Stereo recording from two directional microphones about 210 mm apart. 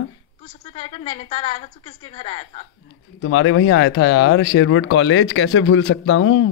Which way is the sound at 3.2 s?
70° left (ahead or behind).